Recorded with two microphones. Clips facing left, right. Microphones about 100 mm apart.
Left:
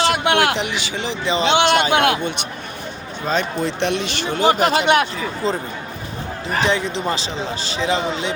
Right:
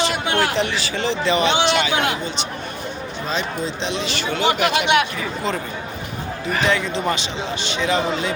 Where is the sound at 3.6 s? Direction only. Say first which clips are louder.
Left 4 dB; 60° left (ahead or behind).